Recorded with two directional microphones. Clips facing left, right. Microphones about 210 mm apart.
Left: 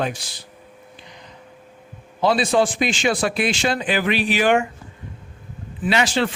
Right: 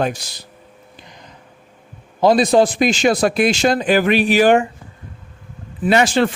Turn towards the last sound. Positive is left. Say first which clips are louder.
# right 5 dB
turn(degrees=-50)  # may be behind; listen again after turning